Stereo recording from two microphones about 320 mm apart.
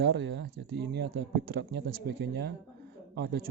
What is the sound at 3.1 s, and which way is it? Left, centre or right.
Speech, right.